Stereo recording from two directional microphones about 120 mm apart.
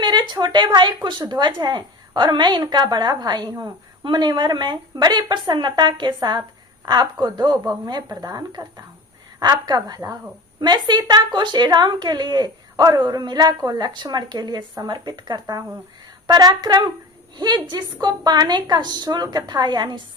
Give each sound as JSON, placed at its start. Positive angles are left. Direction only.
{"t": 0.0, "sound": "speech", "side_deg": -40}